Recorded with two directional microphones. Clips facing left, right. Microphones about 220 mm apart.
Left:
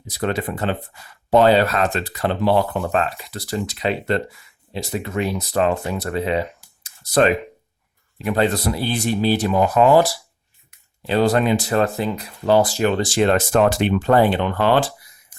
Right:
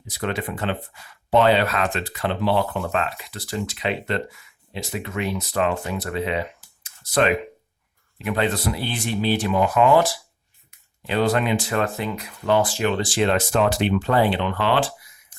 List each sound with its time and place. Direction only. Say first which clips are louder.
0.1 s speech: left 4 dB; 40° left (ahead or behind)
6.8 s computer keyboard: left 4 dB; 40° left (ahead or behind)
8.2 s speech: left 4 dB; 35° left (ahead or behind)
15.3 s a sound: left 4 dB; 10° left (ahead or behind)